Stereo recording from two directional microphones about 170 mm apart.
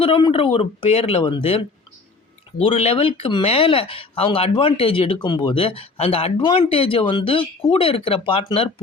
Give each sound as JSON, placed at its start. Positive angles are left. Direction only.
{"t": 0.0, "sound": "speech", "side_deg": 30}